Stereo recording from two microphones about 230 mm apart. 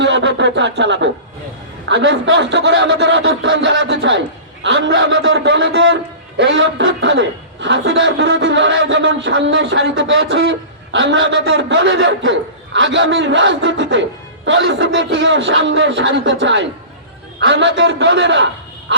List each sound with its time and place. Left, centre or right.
0.0 s a man's voice: right
18.9 s dog: right